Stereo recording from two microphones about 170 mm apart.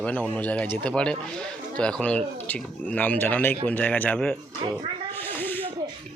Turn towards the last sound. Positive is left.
turn(degrees=10)  # may be behind; listen again after turning